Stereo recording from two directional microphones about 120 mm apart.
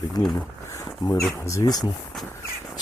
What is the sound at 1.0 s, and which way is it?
Speech, 30° left (ahead or behind).